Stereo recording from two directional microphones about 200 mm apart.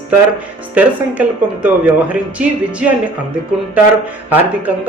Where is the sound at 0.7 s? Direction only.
5° right (ahead or behind).